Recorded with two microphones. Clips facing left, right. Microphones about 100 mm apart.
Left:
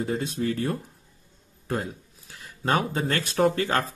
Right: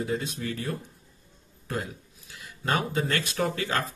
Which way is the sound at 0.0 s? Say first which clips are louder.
Left 3 dB; 35° left (ahead or behind).